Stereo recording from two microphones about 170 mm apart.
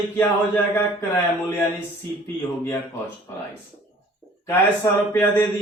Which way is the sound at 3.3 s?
15° left (ahead or behind).